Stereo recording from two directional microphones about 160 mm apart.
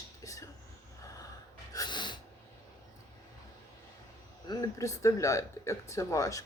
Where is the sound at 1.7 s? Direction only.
30° left (ahead or behind).